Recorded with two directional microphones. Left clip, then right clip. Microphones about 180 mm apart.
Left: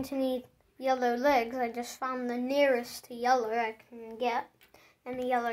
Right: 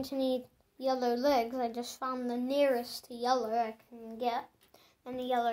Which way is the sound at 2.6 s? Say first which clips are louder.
Left 3 dB; 20° right (ahead or behind).